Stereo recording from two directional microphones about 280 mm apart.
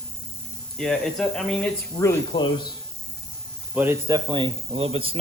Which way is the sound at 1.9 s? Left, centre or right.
Centre.